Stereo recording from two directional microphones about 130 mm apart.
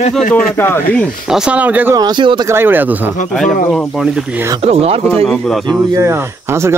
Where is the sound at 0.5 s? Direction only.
20° left (ahead or behind).